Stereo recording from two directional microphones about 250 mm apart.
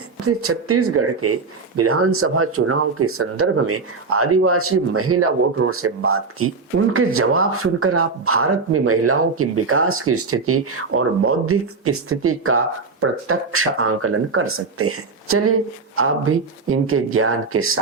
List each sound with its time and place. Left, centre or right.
0.3 s speech: right